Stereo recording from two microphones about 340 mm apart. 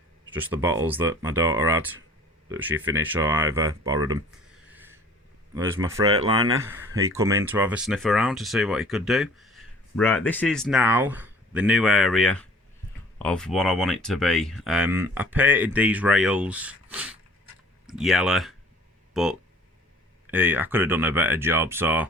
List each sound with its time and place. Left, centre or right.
0.3 s speech: centre
4.7 s a sound: centre
5.5 s speech: centre